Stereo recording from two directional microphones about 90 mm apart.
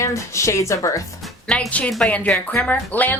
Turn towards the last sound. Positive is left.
turn(degrees=20)  # may be behind; listen again after turning